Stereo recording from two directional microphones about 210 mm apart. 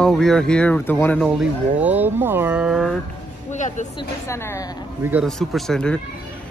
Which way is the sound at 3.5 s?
35° left (ahead or behind).